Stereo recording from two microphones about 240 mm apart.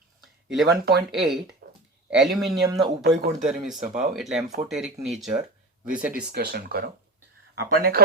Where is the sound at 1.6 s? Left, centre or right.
Right.